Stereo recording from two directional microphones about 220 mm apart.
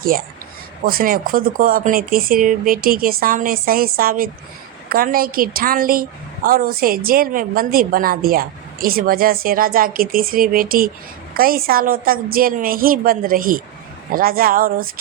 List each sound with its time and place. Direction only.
0.0 s a woman's voice: 40° right (ahead or behind)